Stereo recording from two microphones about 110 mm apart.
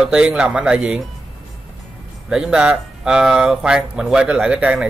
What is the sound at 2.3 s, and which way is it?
Speech, 5° right (ahead or behind).